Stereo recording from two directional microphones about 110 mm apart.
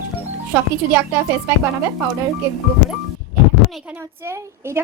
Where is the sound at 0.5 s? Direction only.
20° right (ahead or behind).